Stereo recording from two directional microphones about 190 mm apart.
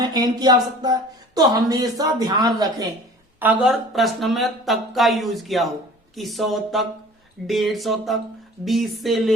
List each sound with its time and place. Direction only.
0.0 s a woman's voice: 20° right (ahead or behind)
3.4 s speech: 5° right (ahead or behind)